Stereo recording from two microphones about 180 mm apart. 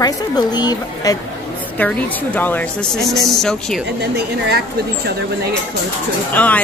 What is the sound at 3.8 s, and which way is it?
Speech, 65° right (ahead or behind).